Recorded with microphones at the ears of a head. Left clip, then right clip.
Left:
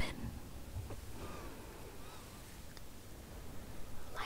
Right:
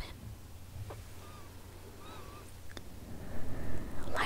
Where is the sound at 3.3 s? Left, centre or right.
Right.